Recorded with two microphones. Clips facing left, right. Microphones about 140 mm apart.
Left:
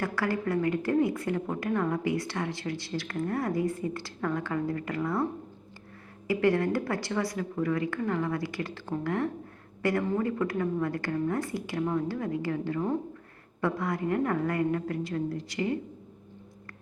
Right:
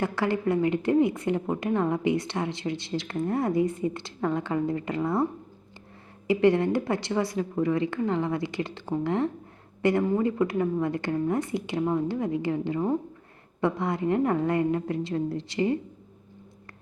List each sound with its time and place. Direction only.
0.0 s speech: 25° right (ahead or behind)
6.2 s speech: 20° right (ahead or behind)